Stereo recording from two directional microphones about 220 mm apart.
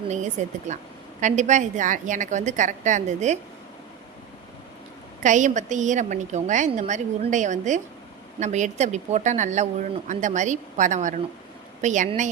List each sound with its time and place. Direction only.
0.1 s a woman's voice: 30° right (ahead or behind)
5.2 s a woman's voice: 35° right (ahead or behind)